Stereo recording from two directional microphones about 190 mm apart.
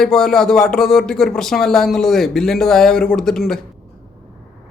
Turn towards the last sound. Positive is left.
turn(degrees=0)  # may be behind; listen again after turning